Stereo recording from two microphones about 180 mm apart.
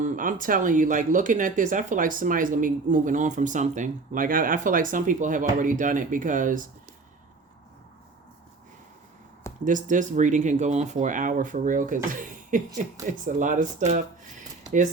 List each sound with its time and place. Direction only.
0.0 s speech: 45° right (ahead or behind)
9.6 s speech: 45° right (ahead or behind)